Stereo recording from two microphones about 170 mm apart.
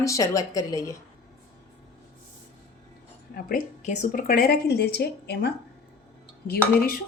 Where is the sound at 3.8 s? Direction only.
45° left (ahead or behind); by 5.5 s 75° left (ahead or behind).